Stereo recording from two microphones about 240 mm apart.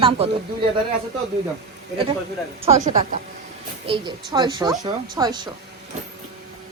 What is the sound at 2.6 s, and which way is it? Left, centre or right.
A woman's voice, right.